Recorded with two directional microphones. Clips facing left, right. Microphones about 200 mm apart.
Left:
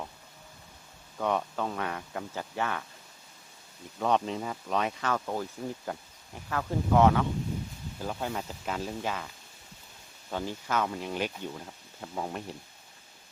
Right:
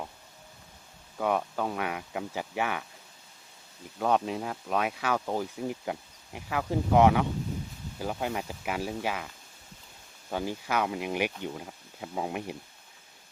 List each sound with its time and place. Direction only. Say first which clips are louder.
1.2 s speech: right 1 dB; 5° right (ahead or behind)
4.0 s speech: right 1 dB; 5° right (ahead or behind)